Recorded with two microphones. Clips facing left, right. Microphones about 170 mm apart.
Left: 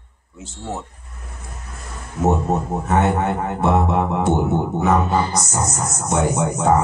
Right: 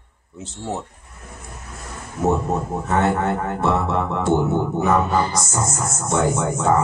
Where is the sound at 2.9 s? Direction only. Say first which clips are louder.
Left 1 dB; 20° left (ahead or behind).